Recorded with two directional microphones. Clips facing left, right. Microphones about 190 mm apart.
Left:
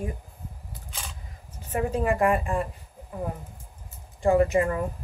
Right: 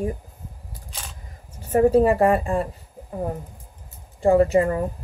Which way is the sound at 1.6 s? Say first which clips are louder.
Right 9 dB; 40° right (ahead or behind).